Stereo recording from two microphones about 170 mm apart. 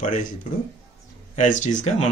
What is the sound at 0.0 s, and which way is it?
Speech, 50° left (ahead or behind).